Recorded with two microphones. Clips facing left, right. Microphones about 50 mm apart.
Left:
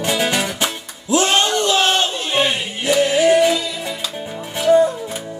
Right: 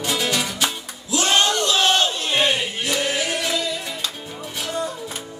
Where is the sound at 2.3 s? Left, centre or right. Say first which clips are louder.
Left 2 dB; centre.